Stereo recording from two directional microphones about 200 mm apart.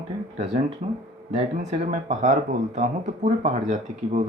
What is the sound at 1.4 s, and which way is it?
Speech, 35° right (ahead or behind).